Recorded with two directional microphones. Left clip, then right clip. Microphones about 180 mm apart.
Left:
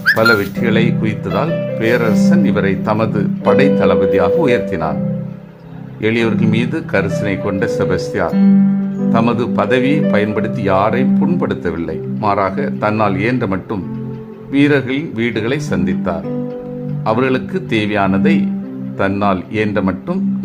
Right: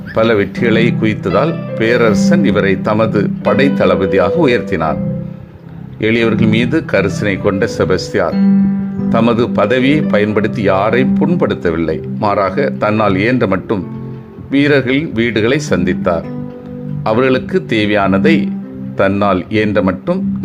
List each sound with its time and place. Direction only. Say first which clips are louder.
0.1 s speech: left 1 dB; 15° right (ahead or behind)
6.0 s speech: right 3 dB; 15° right (ahead or behind)